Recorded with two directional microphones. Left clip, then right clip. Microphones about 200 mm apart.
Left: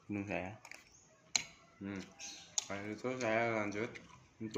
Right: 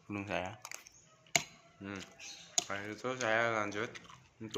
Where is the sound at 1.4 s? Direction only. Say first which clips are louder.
Right 5 dB; 10° left (ahead or behind).